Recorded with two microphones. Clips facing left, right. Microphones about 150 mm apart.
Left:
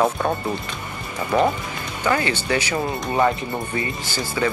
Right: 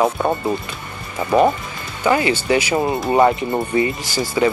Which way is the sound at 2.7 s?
25° right (ahead or behind).